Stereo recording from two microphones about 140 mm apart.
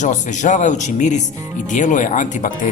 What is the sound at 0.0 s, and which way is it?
Speech, 60° left (ahead or behind).